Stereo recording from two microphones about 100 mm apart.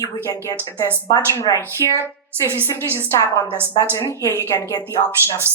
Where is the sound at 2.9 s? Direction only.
30° left (ahead or behind).